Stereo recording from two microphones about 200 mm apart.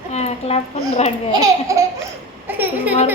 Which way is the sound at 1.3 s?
15° right (ahead or behind).